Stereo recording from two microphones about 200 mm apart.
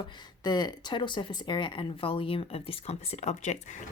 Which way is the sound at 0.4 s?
20° left (ahead or behind).